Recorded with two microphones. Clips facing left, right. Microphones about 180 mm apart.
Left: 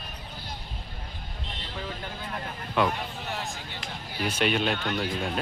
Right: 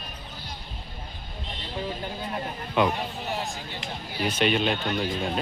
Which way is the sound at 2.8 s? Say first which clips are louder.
Right 2 dB; 15° right (ahead or behind).